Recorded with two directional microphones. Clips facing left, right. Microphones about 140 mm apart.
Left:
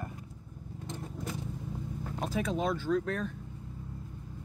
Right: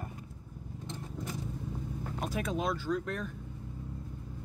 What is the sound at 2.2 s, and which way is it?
Speech, 5° right (ahead or behind).